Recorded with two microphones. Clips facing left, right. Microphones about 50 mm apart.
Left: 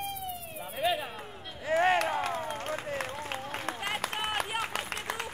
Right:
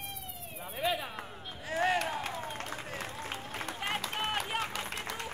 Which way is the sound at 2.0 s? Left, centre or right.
Left.